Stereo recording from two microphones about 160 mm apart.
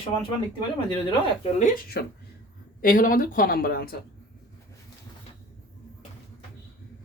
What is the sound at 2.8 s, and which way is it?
Speech, 60° left (ahead or behind).